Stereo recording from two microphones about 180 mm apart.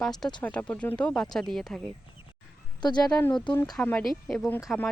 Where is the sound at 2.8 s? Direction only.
20° left (ahead or behind).